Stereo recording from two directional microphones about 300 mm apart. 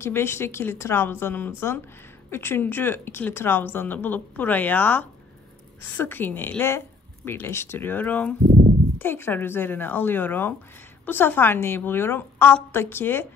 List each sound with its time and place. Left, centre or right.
0.0 s speech: centre
8.5 s a sound: right
8.9 s speech: centre